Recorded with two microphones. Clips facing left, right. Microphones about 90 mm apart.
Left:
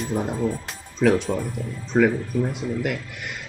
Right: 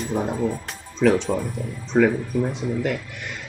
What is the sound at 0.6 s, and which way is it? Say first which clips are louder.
Speech: right 1 dB; 5° left (ahead or behind).